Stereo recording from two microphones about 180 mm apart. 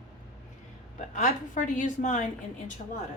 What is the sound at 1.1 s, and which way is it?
A woman's voice, 45° left (ahead or behind).